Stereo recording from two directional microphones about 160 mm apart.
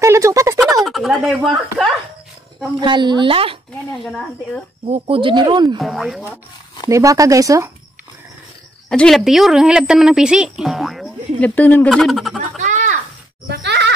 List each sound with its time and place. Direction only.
0.0 s speech: 20° right (ahead or behind)
0.6 s speech: centre (ahead or behind)
2.8 s speech: 30° right (ahead or behind)
4.0 s a woman's voice: centre (ahead or behind)
4.8 s speech: 40° right (ahead or behind)
5.8 s a woman's voice: centre (ahead or behind)
6.9 s speech: 20° right (ahead or behind)
8.8 s a woman's voice: 5° left (ahead or behind)
12.5 s a sound: 50° right (ahead or behind)
13.5 s speech: 90° right